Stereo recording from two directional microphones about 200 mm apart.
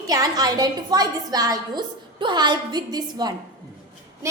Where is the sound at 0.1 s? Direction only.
20° right (ahead or behind).